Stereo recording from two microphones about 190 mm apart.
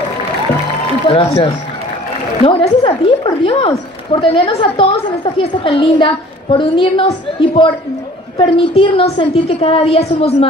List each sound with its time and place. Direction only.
1.0 s a woman's voice: 30° left (ahead or behind)